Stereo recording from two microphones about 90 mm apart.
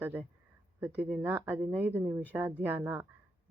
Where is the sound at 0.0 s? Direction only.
20° right (ahead or behind).